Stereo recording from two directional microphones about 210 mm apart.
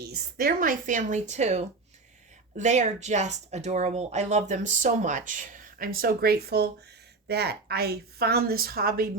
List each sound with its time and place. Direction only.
0.0 s a woman's voice: 50° right (ahead or behind)